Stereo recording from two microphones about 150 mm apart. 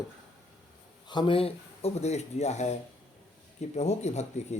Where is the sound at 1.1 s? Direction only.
35° left (ahead or behind); by 4.6 s 50° left (ahead or behind).